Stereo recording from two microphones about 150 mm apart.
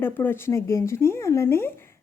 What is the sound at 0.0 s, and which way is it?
Speech, 15° left (ahead or behind).